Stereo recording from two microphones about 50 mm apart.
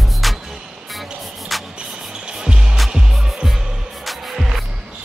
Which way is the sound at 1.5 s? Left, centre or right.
Centre.